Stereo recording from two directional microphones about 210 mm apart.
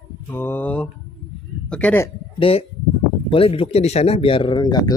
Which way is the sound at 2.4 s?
25° left (ahead or behind).